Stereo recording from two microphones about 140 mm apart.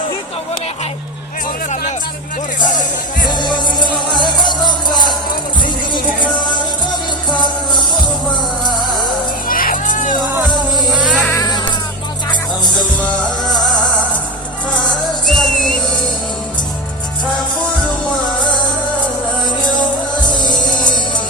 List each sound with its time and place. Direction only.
2.6 s music: 30° left (ahead or behind)
7.3 s music: 35° left (ahead or behind)
9.5 s music: 90° left; by 10.2 s 70° left (ahead or behind)
11.3 s cat: 30° left (ahead or behind)
15.3 s music: centre (ahead or behind)
20.2 s music: 30° left (ahead or behind)